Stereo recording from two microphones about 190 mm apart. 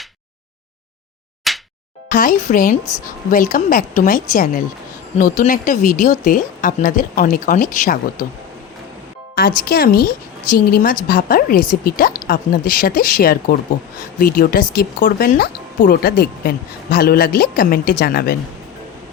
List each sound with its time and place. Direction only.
1.5 s slap: centre (ahead or behind)
2.0 s speech: 45° left (ahead or behind)
9.6 s speech: 55° left (ahead or behind)